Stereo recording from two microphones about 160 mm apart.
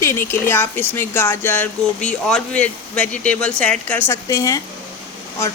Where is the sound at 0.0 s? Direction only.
15° left (ahead or behind).